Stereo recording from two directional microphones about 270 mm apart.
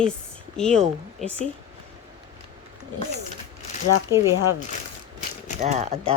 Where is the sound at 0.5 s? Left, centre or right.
Centre.